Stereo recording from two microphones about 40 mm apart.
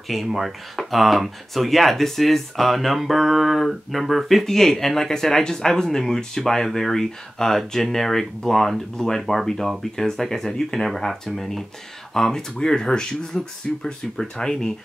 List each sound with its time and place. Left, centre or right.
0.1 s speech: centre
4.5 s speech: centre